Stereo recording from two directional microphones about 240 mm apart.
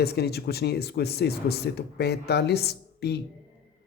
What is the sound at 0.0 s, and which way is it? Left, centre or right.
Speech, left.